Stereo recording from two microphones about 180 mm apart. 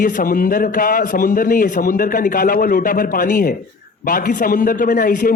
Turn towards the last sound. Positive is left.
turn(degrees=50)  # may be behind; listen again after turning